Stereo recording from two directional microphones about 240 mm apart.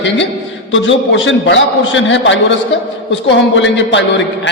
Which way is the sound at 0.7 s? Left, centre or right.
Left.